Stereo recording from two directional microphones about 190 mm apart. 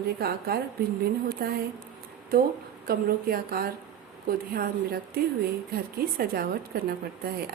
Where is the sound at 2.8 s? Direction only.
50° right (ahead or behind).